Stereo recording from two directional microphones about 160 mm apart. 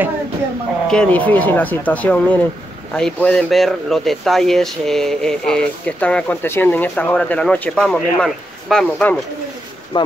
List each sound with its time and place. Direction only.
0.8 s speech: 5° left (ahead or behind)
9.9 s speech: 30° left (ahead or behind)